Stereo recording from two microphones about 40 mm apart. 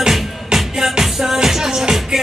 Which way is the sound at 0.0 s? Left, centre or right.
Centre.